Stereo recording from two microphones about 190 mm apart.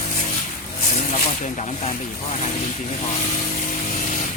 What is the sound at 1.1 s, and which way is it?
Speech, 35° left (ahead or behind).